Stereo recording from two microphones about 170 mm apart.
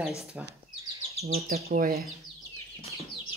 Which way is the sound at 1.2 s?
60° right (ahead or behind).